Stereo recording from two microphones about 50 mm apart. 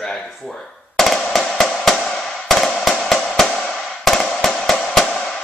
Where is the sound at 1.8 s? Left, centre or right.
Centre.